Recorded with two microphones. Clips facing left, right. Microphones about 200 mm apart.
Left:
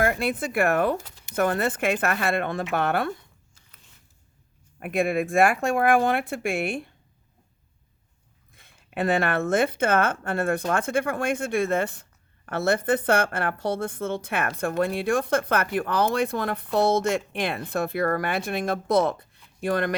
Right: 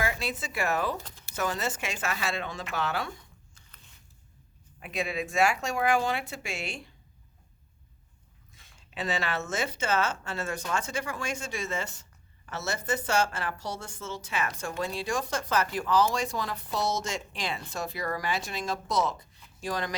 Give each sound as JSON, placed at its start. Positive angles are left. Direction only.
{"t": 0.0, "sound": "a woman's voice", "side_deg": 55}
{"t": 1.0, "sound": "a sound", "side_deg": 15}
{"t": 1.4, "sound": "a woman's voice", "side_deg": 55}
{"t": 4.8, "sound": "a woman's voice", "side_deg": 55}
{"t": 8.5, "sound": "a woman's voice", "side_deg": 55}